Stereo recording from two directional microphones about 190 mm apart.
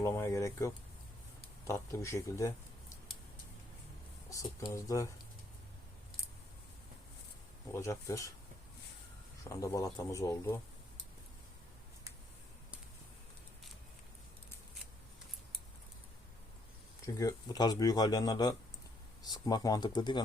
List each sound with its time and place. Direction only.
0.0 s a sound: 15° left (ahead or behind)
1.6 s a man's voice: 15° left (ahead or behind)
4.3 s a man's voice: 15° left (ahead or behind)
7.7 s a man's voice: 15° left (ahead or behind)
9.4 s a man's voice: 15° left (ahead or behind)
17.2 s speech: 20° left (ahead or behind)